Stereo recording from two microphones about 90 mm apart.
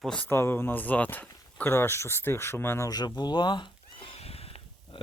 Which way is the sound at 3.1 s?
55° left (ahead or behind).